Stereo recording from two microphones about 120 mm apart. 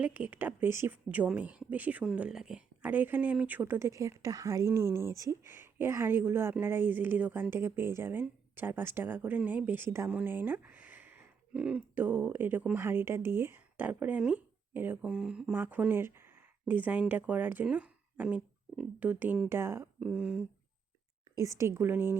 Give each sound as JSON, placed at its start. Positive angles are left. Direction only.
{"t": 0.0, "sound": "speech", "side_deg": -15}
{"t": 21.3, "sound": "a woman's voice", "side_deg": -25}